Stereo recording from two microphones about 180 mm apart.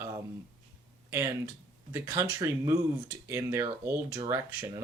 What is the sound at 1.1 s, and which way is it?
Speech, 15° right (ahead or behind).